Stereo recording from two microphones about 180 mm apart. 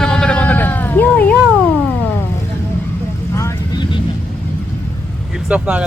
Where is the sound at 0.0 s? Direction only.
5° left (ahead or behind).